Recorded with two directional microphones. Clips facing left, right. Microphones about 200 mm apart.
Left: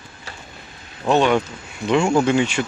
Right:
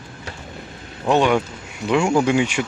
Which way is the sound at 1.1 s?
10° right (ahead or behind).